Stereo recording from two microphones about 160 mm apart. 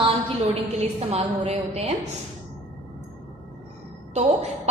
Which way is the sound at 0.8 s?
40° right (ahead or behind).